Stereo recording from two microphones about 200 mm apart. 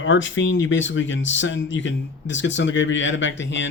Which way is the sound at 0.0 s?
70° left (ahead or behind).